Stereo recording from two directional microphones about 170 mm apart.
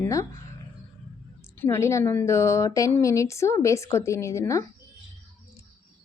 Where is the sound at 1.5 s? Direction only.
15° left (ahead or behind).